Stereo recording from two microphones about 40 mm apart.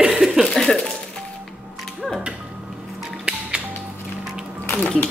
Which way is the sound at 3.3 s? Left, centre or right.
Right.